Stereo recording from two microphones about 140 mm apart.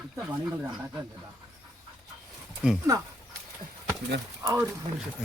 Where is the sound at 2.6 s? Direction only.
5° right (ahead or behind).